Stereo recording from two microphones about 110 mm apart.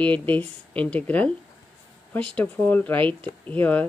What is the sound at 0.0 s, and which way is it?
Speech, 15° left (ahead or behind).